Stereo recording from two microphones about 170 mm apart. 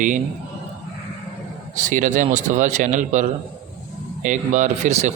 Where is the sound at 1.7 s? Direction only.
50° right (ahead or behind).